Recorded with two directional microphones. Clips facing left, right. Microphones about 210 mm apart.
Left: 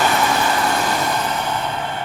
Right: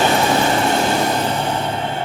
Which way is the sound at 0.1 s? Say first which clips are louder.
Right 3 dB; 30° right (ahead or behind).